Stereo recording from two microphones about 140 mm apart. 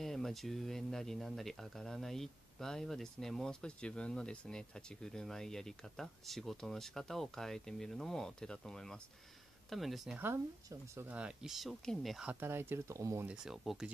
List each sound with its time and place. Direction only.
0.0 s speech: centre (ahead or behind)
10.1 s speech: 15° right (ahead or behind); by 12.3 s centre (ahead or behind)
12.3 s speech: 15° right (ahead or behind)
13.3 s speech: 5° right (ahead or behind)